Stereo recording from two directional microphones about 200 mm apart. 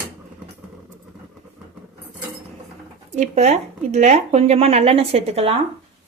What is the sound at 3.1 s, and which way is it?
Speech, 35° right (ahead or behind).